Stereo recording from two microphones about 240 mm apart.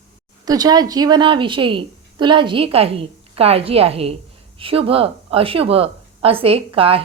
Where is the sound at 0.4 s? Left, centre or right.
Centre.